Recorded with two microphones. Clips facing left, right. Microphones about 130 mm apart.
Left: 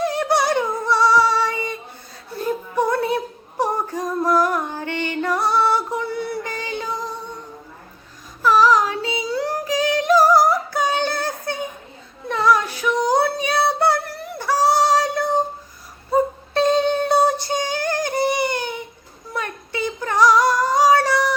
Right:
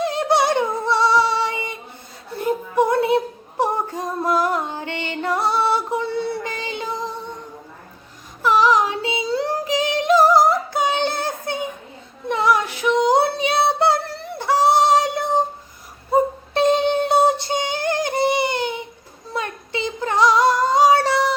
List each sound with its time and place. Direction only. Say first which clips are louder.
0.0 s female singing: right 1 dB; 20° right (ahead or behind)
3.6 s music: even; 20° right (ahead or behind)
8.4 s singing: left 1 dB; 20° right (ahead or behind)
12.3 s female singing: left 1 dB; 20° right (ahead or behind)
16.1 s music: right 1 dB; 20° right (ahead or behind)
19.3 s female singing: right 1 dB; 20° right (ahead or behind)